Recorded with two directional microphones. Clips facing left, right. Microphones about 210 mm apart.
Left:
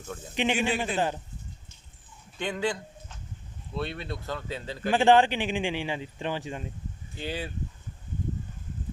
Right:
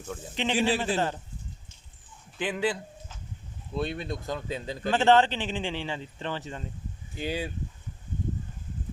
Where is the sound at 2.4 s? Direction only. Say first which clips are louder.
Right 1 dB; 5° right (ahead or behind).